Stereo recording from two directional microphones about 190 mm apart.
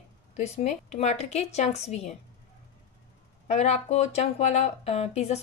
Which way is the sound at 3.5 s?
35° left (ahead or behind).